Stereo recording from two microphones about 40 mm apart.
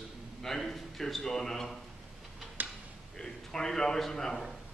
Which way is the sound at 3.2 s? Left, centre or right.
Centre.